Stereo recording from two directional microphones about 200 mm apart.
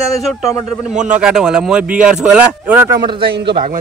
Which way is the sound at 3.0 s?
25° right (ahead or behind).